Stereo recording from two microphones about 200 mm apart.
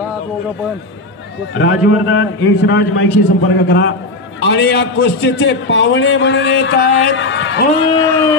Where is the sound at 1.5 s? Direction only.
75° left (ahead or behind).